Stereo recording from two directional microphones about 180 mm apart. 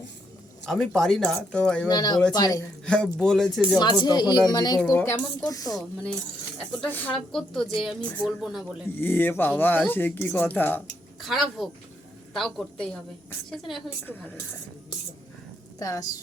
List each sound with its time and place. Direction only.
0.6 s a woman's voice: 5° left (ahead or behind)
1.9 s speech: 20° left (ahead or behind)
2.8 s a woman's voice: 5° left (ahead or behind)
4.0 s speech: 25° left (ahead or behind)
4.8 s a woman's voice: 10° left (ahead or behind)
9.0 s speech: 10° left (ahead or behind)
11.2 s a woman's voice: centre (ahead or behind)
14.0 s speech: 10° left (ahead or behind)
15.8 s speech: 20° left (ahead or behind)